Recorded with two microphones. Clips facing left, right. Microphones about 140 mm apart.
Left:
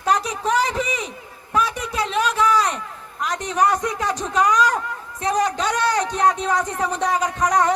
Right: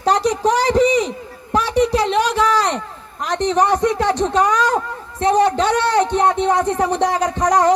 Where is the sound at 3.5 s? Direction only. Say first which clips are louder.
Right 4 dB; 30° right (ahead or behind).